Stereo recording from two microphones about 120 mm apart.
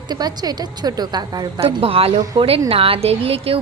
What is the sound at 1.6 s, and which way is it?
A woman's voice, 50° right (ahead or behind).